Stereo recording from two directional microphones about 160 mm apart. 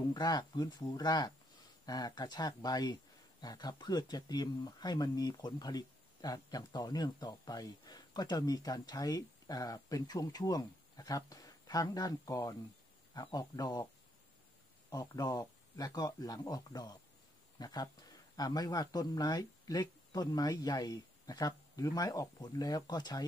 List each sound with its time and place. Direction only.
0.0 s speech: 25° left (ahead or behind)
14.9 s speech: 25° left (ahead or behind)